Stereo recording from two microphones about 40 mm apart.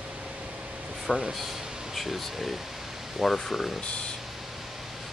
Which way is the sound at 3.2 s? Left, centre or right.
Centre.